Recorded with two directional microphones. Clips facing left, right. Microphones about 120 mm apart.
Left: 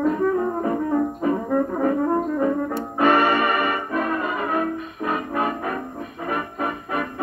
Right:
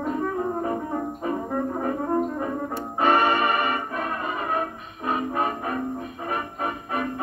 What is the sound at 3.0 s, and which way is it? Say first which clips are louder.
Music: left 2 dB; 25° right (ahead or behind).